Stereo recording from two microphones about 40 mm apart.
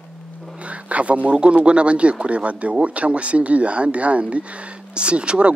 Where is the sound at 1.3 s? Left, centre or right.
Right.